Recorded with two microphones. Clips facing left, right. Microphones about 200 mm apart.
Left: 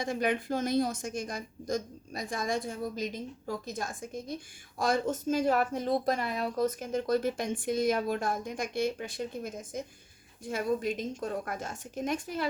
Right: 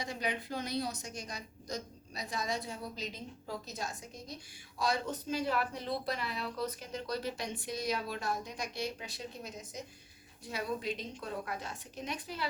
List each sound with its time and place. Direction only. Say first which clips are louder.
0.0 s speech: left 7 dB; 50° left (ahead or behind)